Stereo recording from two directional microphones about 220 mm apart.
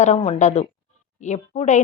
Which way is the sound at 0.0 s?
30° left (ahead or behind).